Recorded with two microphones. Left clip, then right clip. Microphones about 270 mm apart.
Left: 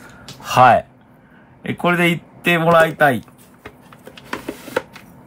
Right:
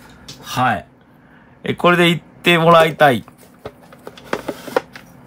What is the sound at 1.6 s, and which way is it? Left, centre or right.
Speech, centre.